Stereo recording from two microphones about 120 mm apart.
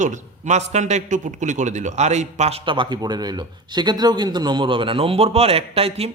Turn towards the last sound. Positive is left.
turn(degrees=-55)  # may be behind; listen again after turning